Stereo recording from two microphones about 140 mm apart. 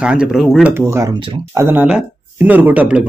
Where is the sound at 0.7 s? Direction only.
20° right (ahead or behind).